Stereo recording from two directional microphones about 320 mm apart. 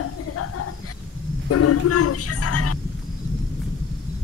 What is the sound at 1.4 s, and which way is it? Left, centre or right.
Speech, left.